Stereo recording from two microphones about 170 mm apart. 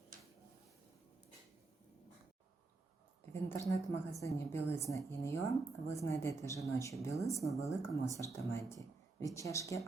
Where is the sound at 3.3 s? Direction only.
15° left (ahead or behind).